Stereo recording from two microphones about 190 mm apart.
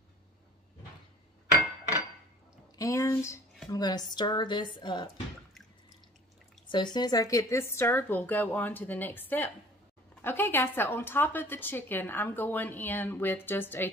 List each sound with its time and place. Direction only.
2.8 s a sound: 15° left (ahead or behind)
3.7 s speech: 20° left (ahead or behind)
6.7 s a woman's voice: 25° left (ahead or behind)